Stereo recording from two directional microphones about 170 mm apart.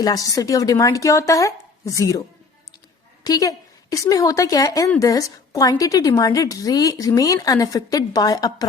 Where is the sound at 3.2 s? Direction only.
20° left (ahead or behind).